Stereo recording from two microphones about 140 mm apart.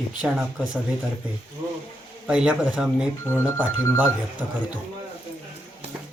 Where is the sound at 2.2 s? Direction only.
5° right (ahead or behind).